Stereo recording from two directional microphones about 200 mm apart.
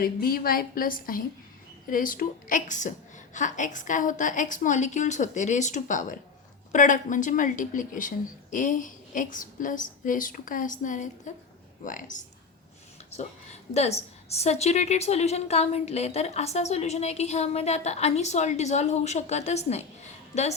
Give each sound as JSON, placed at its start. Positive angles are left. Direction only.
{"t": 0.0, "sound": "a woman's voice", "side_deg": 45}
{"t": 13.7, "sound": "a woman's voice", "side_deg": 30}